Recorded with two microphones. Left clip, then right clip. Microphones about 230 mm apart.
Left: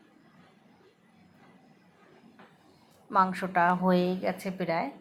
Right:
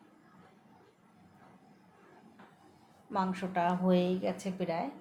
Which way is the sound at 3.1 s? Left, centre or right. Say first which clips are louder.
Left 8 dB; centre.